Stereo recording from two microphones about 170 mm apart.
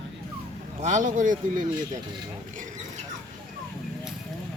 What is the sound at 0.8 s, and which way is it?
Speech, 45° right (ahead or behind).